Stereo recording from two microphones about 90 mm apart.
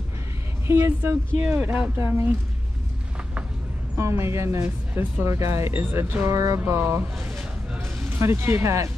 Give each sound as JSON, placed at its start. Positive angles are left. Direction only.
{"t": 0.7, "sound": "speech", "side_deg": -30}
{"t": 1.4, "sound": "speech", "side_deg": -20}
{"t": 3.9, "sound": "speech", "side_deg": -30}
{"t": 6.3, "sound": "a sound", "side_deg": -40}
{"t": 6.7, "sound": "speech", "side_deg": -30}